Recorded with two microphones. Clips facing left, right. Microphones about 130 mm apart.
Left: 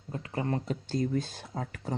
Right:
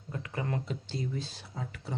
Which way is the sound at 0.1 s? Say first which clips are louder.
Left 3 dB; 35° left (ahead or behind).